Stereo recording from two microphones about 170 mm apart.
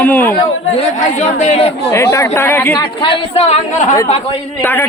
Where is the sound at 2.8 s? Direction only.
30° left (ahead or behind); by 3.9 s 45° left (ahead or behind).